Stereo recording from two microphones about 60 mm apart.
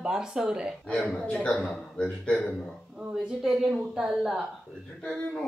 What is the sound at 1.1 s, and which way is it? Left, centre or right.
A man's voice, left.